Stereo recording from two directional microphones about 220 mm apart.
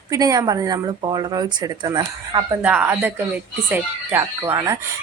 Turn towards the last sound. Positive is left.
turn(degrees=-15)  # may be behind; listen again after turning